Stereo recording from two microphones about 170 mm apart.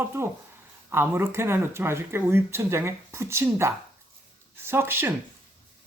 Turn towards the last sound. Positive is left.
turn(degrees=-15)  # may be behind; listen again after turning